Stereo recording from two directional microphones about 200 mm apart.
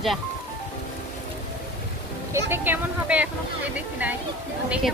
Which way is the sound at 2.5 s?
10° right (ahead or behind).